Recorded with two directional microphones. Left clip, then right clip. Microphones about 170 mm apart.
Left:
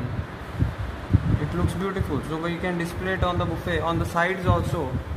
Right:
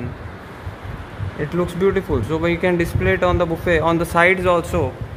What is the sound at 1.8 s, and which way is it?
Speech, 65° right (ahead or behind).